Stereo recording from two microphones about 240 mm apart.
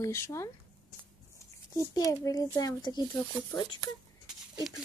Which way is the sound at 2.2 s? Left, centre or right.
Centre.